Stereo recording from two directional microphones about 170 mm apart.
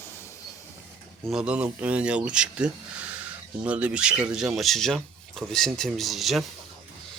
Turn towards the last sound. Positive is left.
turn(degrees=0)  # may be behind; listen again after turning